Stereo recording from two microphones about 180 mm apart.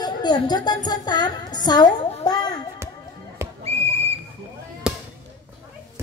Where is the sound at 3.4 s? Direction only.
15° right (ahead or behind).